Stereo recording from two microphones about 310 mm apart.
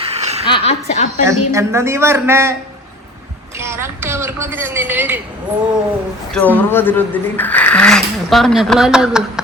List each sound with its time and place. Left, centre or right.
0.0 s a sound: right
0.4 s a woman's voice: centre
1.2 s speech: centre
3.6 s speech: centre
6.3 s speech: centre